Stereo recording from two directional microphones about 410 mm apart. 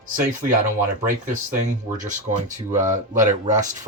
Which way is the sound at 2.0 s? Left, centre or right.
Centre.